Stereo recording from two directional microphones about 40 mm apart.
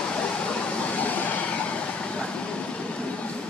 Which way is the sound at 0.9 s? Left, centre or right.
Left.